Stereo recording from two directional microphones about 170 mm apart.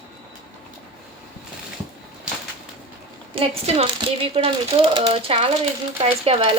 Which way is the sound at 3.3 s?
30° right (ahead or behind).